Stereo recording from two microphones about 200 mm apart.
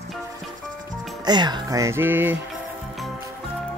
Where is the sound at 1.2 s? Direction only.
20° right (ahead or behind).